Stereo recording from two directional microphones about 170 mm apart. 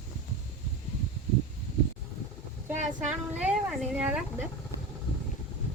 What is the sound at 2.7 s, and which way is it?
A woman's voice, 10° right (ahead or behind).